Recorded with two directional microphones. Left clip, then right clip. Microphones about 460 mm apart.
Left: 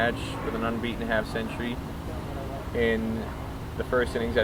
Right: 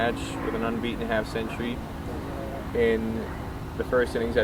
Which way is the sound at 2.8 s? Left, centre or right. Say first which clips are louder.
Right 2 dB; centre.